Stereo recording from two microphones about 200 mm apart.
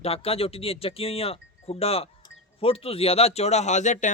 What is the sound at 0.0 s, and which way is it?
Speech, 30° left (ahead or behind).